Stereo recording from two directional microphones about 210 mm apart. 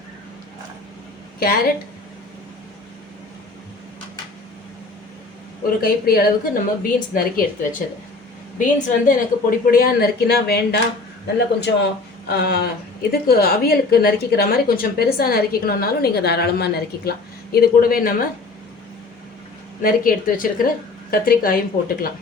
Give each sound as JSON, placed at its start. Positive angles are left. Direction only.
{"t": 5.8, "sound": "a woman's voice", "side_deg": 45}
{"t": 8.5, "sound": "a woman's voice", "side_deg": 40}
{"t": 19.8, "sound": "a woman's voice", "side_deg": 40}